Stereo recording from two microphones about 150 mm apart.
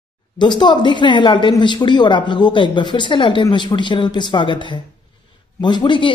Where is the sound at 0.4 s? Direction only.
30° left (ahead or behind).